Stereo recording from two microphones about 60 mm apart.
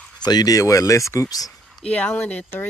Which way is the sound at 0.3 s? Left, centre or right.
Left.